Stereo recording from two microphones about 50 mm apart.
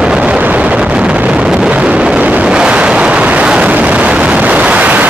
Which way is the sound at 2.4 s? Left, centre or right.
Centre.